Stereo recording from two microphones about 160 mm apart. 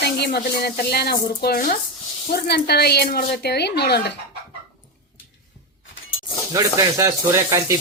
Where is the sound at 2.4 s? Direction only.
90° left.